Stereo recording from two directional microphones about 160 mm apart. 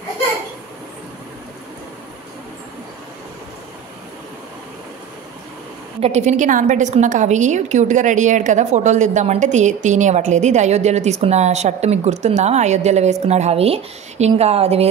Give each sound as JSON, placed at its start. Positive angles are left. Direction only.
{"t": 5.9, "sound": "a woman's voice", "side_deg": -40}